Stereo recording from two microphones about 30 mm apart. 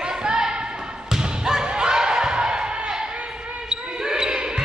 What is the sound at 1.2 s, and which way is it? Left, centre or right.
Thump, right.